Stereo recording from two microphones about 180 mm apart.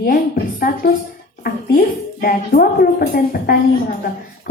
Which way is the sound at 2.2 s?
55° left (ahead or behind).